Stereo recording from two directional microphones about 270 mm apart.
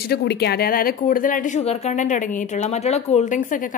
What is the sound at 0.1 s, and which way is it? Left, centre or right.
A woman's voice, left.